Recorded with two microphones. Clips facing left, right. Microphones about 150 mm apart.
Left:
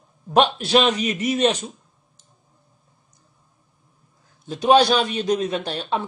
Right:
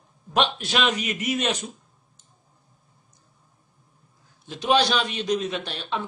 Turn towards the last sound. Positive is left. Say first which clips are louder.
# left 5 dB
turn(degrees=40)  # may be behind; listen again after turning